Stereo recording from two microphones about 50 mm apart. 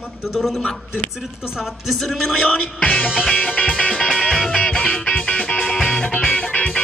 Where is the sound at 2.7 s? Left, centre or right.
Left.